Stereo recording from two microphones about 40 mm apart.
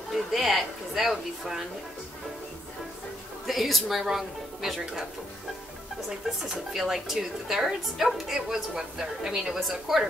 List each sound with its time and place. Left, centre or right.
0.1 s a sound: centre
3.4 s speech: centre
6.0 s a woman's voice: centre
8.7 s a woman's voice: centre
9.6 s a woman's voice: centre